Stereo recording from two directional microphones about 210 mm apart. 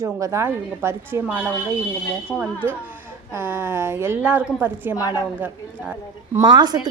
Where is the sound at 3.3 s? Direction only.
10° right (ahead or behind).